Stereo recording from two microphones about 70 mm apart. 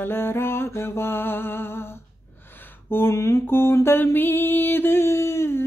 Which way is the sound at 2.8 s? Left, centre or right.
Left.